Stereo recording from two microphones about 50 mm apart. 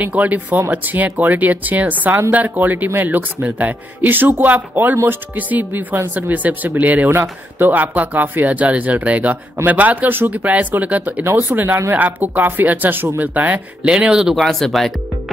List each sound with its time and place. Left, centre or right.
0.0 s speech: right
7.1 s speech: right
11.4 s speech: right
11.9 s speech: right
13.8 s speech: centre
14.3 s speech: centre